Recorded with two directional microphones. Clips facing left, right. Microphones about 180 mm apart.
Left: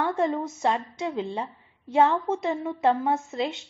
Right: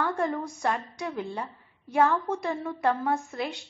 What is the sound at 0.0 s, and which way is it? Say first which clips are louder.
A woman's voice: left 3 dB; 25° left (ahead or behind).